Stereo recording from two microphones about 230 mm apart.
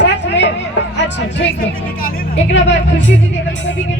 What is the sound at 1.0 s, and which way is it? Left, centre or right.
Speech, left.